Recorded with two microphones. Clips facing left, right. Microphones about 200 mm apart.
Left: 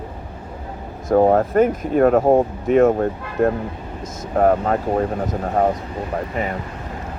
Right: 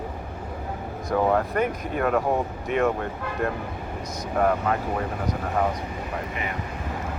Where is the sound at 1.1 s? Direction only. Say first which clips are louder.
Left 8 dB; 45° left (ahead or behind).